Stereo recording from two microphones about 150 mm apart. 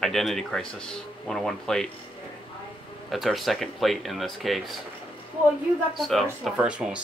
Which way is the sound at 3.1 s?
Centre (ahead or behind).